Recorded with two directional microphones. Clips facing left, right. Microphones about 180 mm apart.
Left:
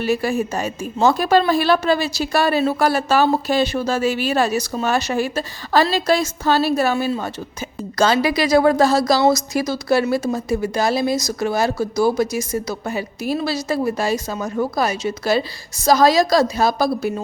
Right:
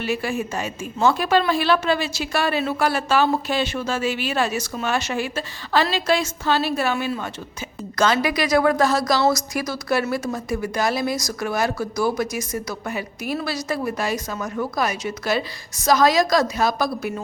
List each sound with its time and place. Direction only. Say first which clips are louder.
0.0 s a woman's voice: left 5 dB; 40° left (ahead or behind)